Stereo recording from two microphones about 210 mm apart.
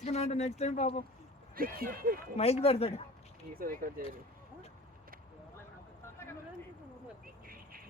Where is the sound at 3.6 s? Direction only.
45° right (ahead or behind).